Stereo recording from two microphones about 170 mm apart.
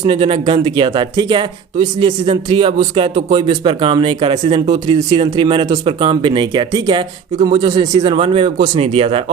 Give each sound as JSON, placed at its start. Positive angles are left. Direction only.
{"t": 0.0, "sound": "a man's voice", "side_deg": -30}